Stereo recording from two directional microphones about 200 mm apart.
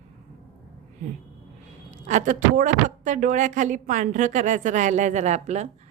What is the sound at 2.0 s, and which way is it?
A woman's voice, 40° right (ahead or behind).